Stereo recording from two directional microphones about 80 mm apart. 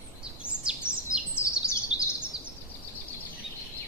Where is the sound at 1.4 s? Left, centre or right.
Left.